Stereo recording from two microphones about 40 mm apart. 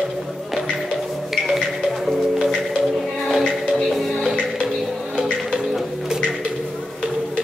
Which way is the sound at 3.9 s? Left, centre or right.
Centre.